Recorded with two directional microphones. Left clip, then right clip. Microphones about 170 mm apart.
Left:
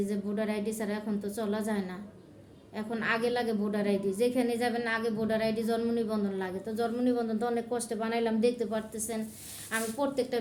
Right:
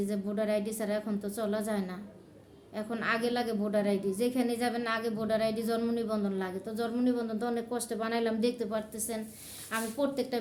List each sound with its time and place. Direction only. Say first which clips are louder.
0.0 s a woman's voice: even; 15° right (ahead or behind)